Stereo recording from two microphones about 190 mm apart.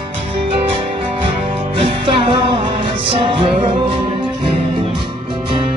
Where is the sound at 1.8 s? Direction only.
30° right (ahead or behind).